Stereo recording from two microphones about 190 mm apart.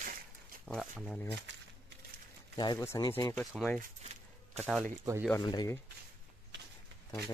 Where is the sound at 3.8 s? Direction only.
35° right (ahead or behind).